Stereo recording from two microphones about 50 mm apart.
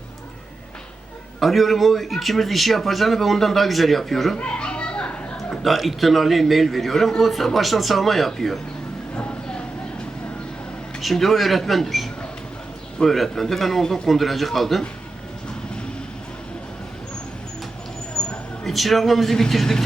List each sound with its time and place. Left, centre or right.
1.4 s speech: centre
4.4 s children playing: left
5.6 s speech: centre
9.1 s vehicle: left
11.0 s speech: centre
18.2 s a sound: centre
18.6 s speech: centre